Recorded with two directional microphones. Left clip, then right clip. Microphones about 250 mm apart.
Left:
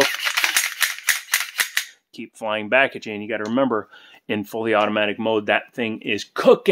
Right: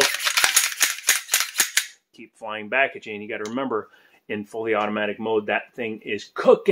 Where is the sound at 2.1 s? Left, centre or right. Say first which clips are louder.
Left 7 dB; left.